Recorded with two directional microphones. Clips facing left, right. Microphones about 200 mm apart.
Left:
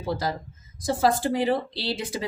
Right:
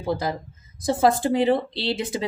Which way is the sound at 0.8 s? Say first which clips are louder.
Right 3 dB; 25° right (ahead or behind).